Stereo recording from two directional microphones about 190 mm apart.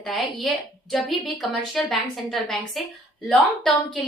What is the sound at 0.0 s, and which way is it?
A woman's voice, centre (ahead or behind).